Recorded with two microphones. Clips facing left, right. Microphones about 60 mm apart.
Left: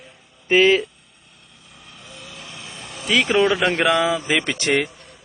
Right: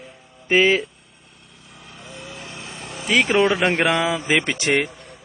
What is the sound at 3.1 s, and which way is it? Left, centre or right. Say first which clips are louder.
A man's voice: even; right.